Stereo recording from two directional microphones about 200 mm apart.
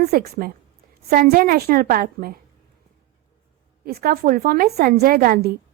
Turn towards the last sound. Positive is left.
turn(degrees=-45)  # may be behind; listen again after turning